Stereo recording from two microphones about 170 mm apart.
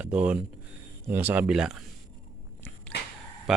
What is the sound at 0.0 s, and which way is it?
Speech, 10° right (ahead or behind).